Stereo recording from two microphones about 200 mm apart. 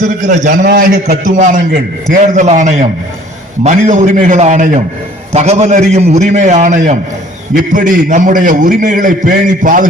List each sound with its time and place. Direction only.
0.0 s a man's voice: 40° right (ahead or behind)
0.6 s a man's voice: 50° right (ahead or behind)